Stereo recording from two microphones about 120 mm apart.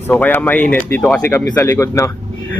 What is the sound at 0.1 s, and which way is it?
Speech, 15° left (ahead or behind).